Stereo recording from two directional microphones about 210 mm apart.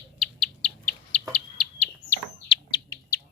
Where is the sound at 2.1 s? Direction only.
20° left (ahead or behind).